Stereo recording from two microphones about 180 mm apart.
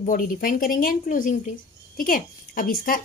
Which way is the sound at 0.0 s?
50° left (ahead or behind).